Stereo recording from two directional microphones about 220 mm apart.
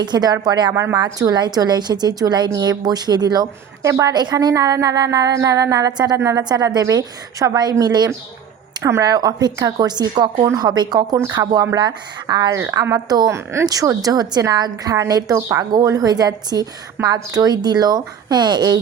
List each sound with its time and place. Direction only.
0.0 s speech: 20° right (ahead or behind)